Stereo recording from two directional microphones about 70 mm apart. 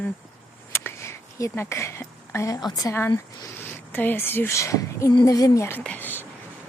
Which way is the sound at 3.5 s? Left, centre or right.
Left.